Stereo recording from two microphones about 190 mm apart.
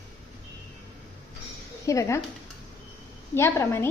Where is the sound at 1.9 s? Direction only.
15° left (ahead or behind).